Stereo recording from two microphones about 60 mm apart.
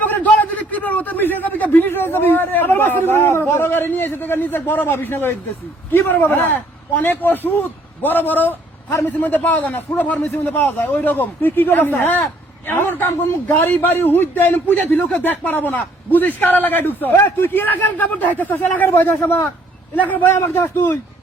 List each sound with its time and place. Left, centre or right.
0.0 s a sound: left
0.7 s a man's voice: left
20.0 s a man's voice: left
20.3 s speech: left